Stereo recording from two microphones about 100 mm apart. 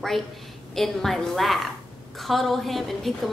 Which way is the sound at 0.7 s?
5° left (ahead or behind).